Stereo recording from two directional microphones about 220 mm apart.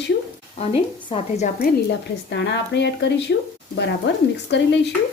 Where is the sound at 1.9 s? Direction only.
50° left (ahead or behind).